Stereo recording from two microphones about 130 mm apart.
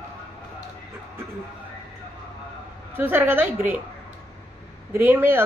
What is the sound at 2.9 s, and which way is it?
Speech, 15° right (ahead or behind).